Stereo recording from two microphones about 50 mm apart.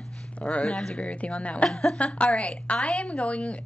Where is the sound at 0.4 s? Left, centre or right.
Left.